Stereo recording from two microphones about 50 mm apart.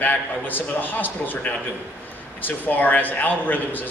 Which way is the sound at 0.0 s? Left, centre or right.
Left.